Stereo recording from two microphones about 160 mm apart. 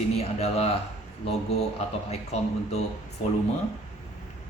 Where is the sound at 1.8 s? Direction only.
40° left (ahead or behind).